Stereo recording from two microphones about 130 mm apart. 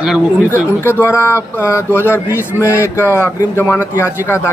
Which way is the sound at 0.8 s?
20° left (ahead or behind).